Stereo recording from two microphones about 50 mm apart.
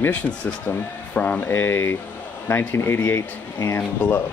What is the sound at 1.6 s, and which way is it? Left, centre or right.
Speech, left.